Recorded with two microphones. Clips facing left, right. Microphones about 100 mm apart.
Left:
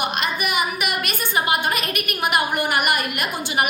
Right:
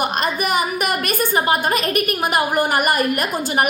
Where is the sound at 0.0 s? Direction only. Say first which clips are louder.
Right 3 dB; 40° right (ahead or behind).